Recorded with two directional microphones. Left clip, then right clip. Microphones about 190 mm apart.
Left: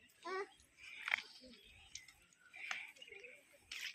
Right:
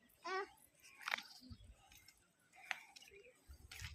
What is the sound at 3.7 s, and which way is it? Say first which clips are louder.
Wild animals: left 7 dB; 55° right (ahead or behind).